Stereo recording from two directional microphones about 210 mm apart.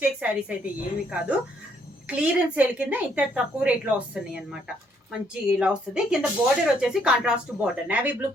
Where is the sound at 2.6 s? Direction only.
5° right (ahead or behind).